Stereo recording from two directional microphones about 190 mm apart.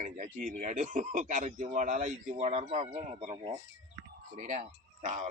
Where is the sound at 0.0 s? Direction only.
40° right (ahead or behind).